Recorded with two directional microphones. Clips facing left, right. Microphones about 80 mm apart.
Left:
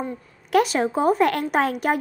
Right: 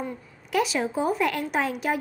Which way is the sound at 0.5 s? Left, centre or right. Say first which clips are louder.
Left 5 dB; left.